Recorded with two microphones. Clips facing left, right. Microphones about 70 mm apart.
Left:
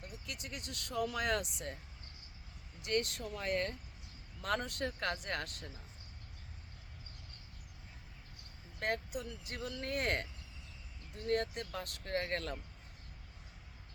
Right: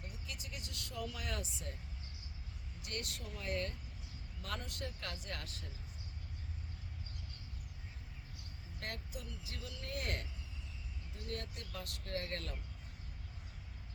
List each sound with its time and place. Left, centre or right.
0.3 s speech: left
2.8 s speech: left
8.8 s speech: left
9.9 s speech: left
11.3 s speech: left